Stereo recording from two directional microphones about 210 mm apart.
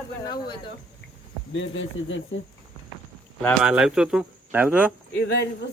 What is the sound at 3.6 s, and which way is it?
Speech, 5° right (ahead or behind).